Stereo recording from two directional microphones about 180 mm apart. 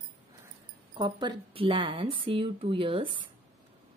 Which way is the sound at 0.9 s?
25° right (ahead or behind).